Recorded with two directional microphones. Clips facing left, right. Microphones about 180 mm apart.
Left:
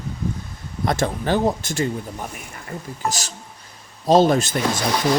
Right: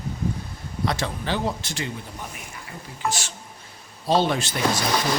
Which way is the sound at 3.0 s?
40° left (ahead or behind).